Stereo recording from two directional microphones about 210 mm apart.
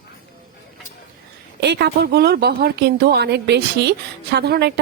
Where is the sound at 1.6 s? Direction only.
50° right (ahead or behind).